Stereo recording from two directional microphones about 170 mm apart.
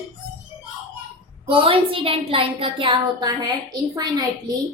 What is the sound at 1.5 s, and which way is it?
A woman's voice, 30° right (ahead or behind).